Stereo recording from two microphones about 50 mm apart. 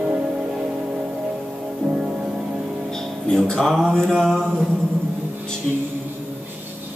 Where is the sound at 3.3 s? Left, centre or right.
Centre.